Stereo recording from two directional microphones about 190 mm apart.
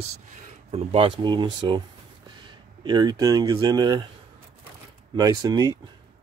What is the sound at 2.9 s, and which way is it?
Speech, 20° right (ahead or behind).